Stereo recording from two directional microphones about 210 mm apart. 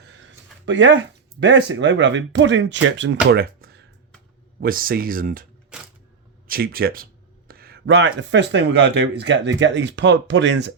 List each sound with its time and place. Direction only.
0.0 s speech: 60° right (ahead or behind)
3.2 s a sound: 45° right (ahead or behind)
4.6 s speech: 45° right (ahead or behind)
6.5 s speech: 45° right (ahead or behind)